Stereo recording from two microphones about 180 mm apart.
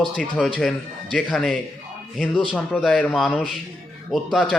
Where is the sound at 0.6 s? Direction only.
Centre (ahead or behind).